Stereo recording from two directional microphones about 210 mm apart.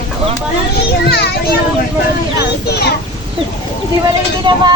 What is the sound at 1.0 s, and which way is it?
Speech, 50° left (ahead or behind).